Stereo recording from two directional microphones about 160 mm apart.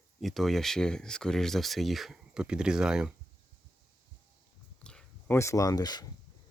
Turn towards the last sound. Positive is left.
turn(degrees=25)  # may be behind; listen again after turning